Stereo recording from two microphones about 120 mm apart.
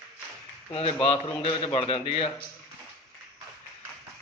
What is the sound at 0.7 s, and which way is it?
A man's voice, 55° left (ahead or behind).